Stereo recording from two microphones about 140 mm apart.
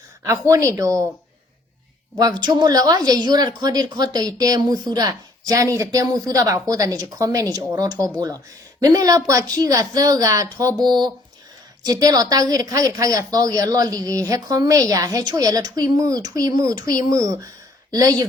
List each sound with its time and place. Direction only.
0.2 s a woman's voice: 20° right (ahead or behind)
2.1 s a woman's voice: 30° right (ahead or behind)